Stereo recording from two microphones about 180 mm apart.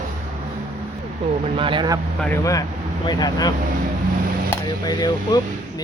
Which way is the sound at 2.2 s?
10° left (ahead or behind).